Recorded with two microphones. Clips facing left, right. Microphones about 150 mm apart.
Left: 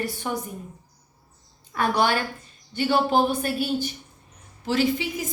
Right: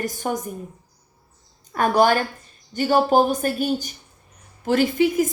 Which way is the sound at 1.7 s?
45° right (ahead or behind).